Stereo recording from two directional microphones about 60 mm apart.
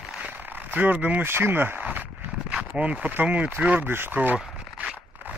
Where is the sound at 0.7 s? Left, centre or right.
Right.